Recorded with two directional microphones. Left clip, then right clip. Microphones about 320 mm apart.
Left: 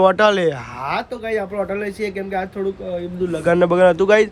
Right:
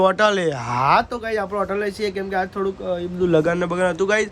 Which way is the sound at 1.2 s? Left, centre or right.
Centre.